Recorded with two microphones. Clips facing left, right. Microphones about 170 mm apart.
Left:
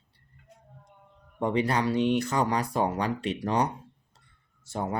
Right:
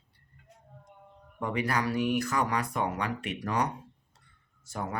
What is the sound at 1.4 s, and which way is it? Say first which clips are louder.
Speech: left 4 dB; 30° left (ahead or behind).